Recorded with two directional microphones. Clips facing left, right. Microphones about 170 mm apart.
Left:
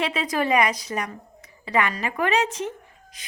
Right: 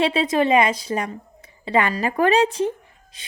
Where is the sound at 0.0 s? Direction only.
30° right (ahead or behind).